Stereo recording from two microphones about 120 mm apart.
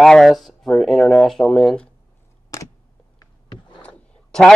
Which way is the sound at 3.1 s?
40° left (ahead or behind).